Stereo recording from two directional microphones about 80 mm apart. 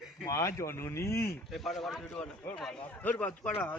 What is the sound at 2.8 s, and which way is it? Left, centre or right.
Speech, left.